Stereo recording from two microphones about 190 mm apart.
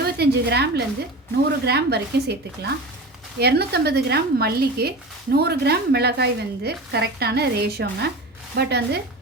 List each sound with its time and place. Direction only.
0.0 s a woman's voice: 60° right (ahead or behind)